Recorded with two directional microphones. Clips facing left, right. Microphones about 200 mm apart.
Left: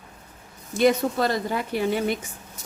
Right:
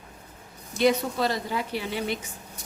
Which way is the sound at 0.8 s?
50° left (ahead or behind).